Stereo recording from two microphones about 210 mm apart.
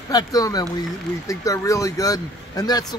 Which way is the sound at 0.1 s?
15° left (ahead or behind).